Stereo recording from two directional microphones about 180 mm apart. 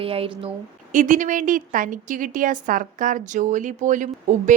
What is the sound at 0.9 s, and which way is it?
A woman's voice, 45° right (ahead or behind).